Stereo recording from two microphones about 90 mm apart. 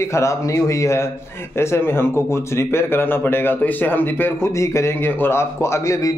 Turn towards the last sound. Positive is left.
turn(degrees=35)  # may be behind; listen again after turning